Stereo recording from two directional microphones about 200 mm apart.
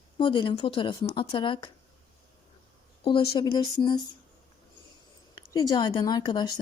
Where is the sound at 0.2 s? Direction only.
25° left (ahead or behind).